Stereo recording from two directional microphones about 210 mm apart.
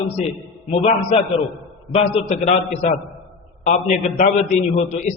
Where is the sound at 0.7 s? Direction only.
25° left (ahead or behind).